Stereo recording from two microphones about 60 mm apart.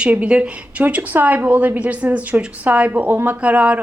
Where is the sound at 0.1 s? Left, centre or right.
Right.